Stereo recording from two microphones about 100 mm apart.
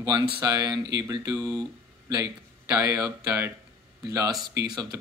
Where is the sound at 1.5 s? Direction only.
40° right (ahead or behind).